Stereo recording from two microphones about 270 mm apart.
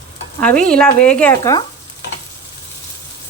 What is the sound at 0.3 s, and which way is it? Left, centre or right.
Speech, centre.